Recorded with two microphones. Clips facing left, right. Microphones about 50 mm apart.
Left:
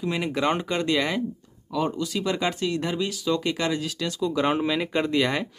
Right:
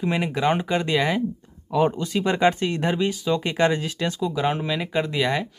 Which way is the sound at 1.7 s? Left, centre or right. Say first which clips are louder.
Right 5 dB; right.